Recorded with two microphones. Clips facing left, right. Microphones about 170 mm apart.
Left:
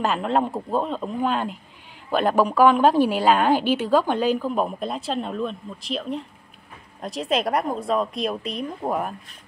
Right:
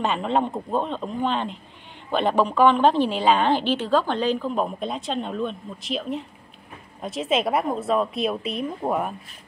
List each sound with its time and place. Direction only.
0.0 s a woman's voice: centre (ahead or behind)